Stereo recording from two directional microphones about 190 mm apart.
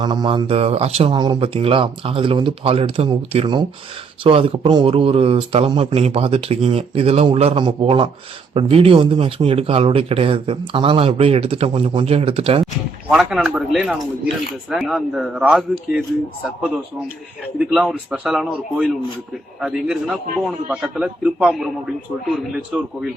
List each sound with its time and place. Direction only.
0.0 s speech: 20° right (ahead or behind)
13.1 s a man's voice: centre (ahead or behind)
17.7 s a man's voice: centre (ahead or behind)